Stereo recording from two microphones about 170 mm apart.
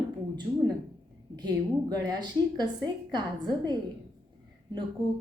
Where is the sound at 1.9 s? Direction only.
25° right (ahead or behind).